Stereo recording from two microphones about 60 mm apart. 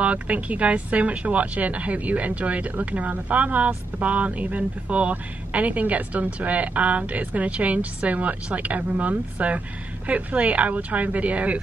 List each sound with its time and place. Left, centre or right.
0.0 s speech: right